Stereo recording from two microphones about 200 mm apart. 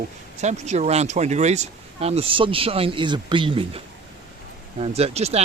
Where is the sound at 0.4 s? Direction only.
35° right (ahead or behind).